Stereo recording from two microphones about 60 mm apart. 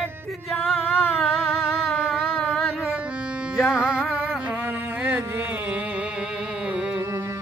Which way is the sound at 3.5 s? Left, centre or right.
Centre.